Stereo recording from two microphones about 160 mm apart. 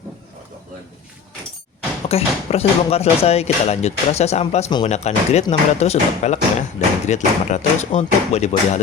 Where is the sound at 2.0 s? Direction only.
40° left (ahead or behind).